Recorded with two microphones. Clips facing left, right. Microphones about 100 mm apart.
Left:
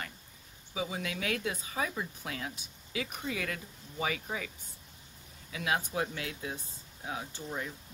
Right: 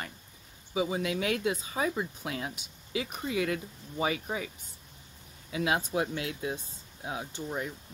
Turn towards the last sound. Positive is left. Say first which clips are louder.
# right 3 dB
turn(degrees=-20)  # may be behind; listen again after turning